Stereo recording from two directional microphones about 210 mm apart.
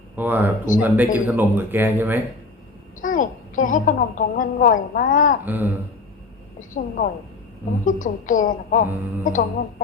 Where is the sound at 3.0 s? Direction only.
40° left (ahead or behind).